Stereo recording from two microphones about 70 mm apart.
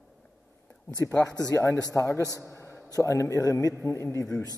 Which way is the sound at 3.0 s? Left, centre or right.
Left.